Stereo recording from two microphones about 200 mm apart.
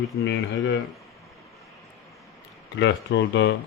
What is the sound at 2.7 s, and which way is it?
Speech, 60° left (ahead or behind).